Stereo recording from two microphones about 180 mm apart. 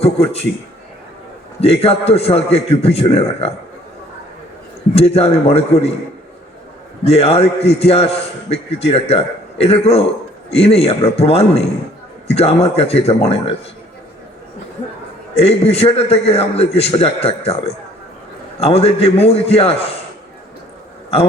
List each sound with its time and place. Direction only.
0.0 s a man's voice: 35° left (ahead or behind)
1.6 s a man's voice: 35° left (ahead or behind)
4.9 s a man's voice: 35° left (ahead or behind)
7.0 s a man's voice: 35° left (ahead or behind)
15.4 s a man's voice: 35° left (ahead or behind)